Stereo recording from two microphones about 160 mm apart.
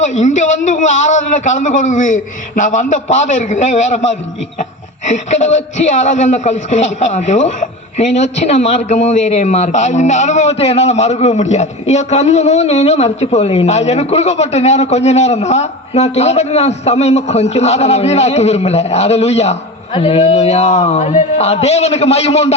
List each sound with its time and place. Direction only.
0.0 s a woman's voice: 50° left (ahead or behind)